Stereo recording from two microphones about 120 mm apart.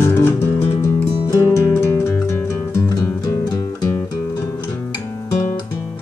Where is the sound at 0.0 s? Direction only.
20° left (ahead or behind).